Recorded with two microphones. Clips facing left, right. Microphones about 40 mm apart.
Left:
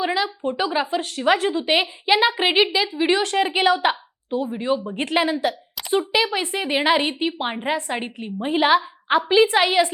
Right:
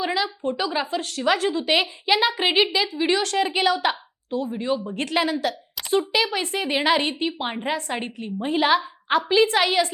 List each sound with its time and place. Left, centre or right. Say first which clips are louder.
0.0 s a sound: left 2 dB; centre
0.7 s speech: left 3 dB; centre
2.9 s a woman's voice: left 2 dB; left